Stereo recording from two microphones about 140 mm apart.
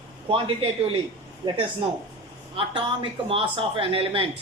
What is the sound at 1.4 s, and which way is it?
Speech, 30° right (ahead or behind).